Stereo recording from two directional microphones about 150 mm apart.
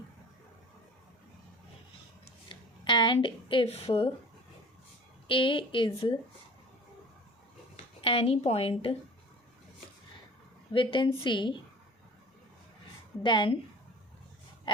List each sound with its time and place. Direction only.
2.2 s a sound: 35° left (ahead or behind)
5.3 s a woman's voice: 35° left (ahead or behind)
8.0 s a woman's voice: 40° left (ahead or behind)
10.7 s a woman's voice: 35° left (ahead or behind)
13.2 s a woman's voice: 35° left (ahead or behind)